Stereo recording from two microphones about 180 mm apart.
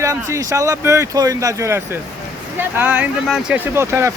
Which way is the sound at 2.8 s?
10° right (ahead or behind).